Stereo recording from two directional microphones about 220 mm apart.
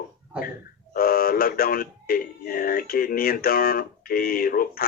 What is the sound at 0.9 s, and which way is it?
Speech, 40° left (ahead or behind).